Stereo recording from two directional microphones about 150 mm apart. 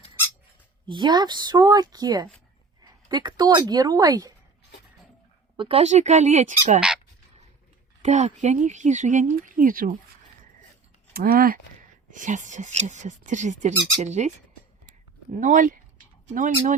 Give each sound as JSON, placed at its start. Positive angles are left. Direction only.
{"t": 0.9, "sound": "a woman's voice", "side_deg": -30}
{"t": 5.5, "sound": "speech", "side_deg": -40}
{"t": 6.7, "sound": "squeak", "side_deg": -5}
{"t": 8.0, "sound": "speech", "side_deg": -50}
{"t": 11.1, "sound": "speech", "side_deg": -80}
{"t": 12.1, "sound": "speech", "side_deg": -55}
{"t": 15.4, "sound": "speech", "side_deg": -60}